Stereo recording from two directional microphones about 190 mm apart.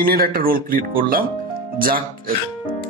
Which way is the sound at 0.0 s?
50° right (ahead or behind).